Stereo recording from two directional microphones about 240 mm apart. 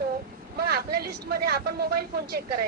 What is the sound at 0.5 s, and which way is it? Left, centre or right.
Speech, right.